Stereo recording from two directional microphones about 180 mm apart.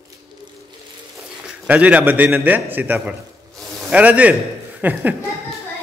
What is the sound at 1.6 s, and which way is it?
Speech, 10° right (ahead or behind).